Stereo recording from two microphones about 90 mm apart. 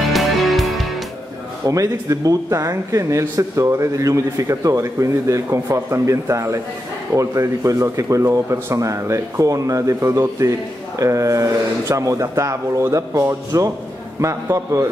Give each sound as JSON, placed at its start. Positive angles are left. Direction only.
{"t": 0.0, "sound": "music", "side_deg": 0}
{"t": 1.7, "sound": "speech", "side_deg": -40}